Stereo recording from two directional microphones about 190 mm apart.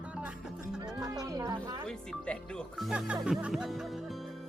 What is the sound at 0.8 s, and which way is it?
Music, 20° right (ahead or behind).